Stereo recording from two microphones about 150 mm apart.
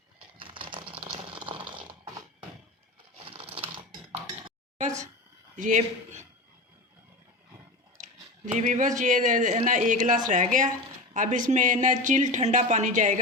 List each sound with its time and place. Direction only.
0.3 s typing: 35° right (ahead or behind)
1.0 s a sound: 35° right (ahead or behind)
3.2 s a sound: 40° right (ahead or behind)
4.1 s dishes: 50° right (ahead or behind)
5.5 s speech: 55° right (ahead or behind)
7.9 s speech: 50° right (ahead or behind)